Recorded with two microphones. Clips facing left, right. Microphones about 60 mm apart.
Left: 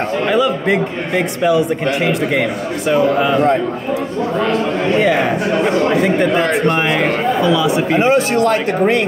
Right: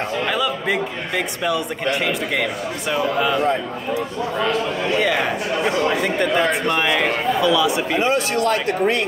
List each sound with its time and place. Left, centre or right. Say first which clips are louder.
0.3 s a man's voice: left 8 dB; centre
2.9 s a man's voice: left 6 dB; centre
6.7 s a man's voice: left 3 dB; left